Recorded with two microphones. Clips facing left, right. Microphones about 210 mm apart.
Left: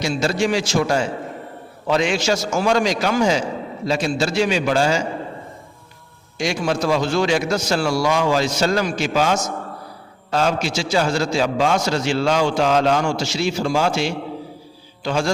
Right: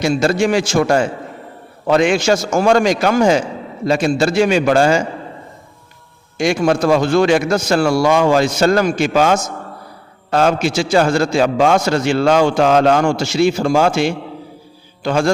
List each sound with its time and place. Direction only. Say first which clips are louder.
0.0 s a man's voice: right 5 dB; 55° right (ahead or behind)
6.3 s a man's voice: right 6 dB; 55° right (ahead or behind)